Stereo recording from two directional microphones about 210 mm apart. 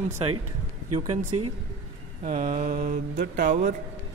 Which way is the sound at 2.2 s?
40° right (ahead or behind).